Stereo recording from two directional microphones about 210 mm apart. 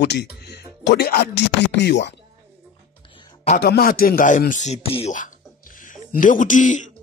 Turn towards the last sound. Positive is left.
turn(degrees=35)  # may be behind; listen again after turning